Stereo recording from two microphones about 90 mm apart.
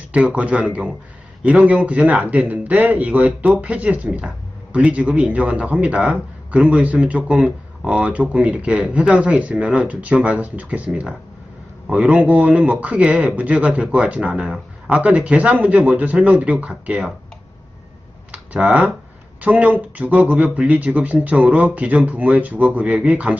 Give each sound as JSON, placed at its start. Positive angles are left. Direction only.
{"t": 0.1, "sound": "speech", "side_deg": -15}
{"t": 18.3, "sound": "computer keyboard", "side_deg": -15}
{"t": 19.4, "sound": "speech", "side_deg": -15}